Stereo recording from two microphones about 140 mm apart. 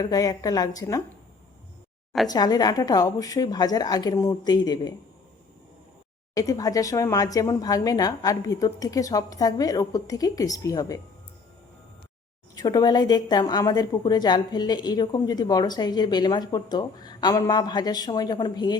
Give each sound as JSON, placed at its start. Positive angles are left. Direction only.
{"t": 0.0, "sound": "a woman's voice", "side_deg": 25}
{"t": 2.2, "sound": "a woman's voice", "side_deg": 30}
{"t": 6.3, "sound": "a woman's voice", "side_deg": 25}
{"t": 12.5, "sound": "a woman's voice", "side_deg": 30}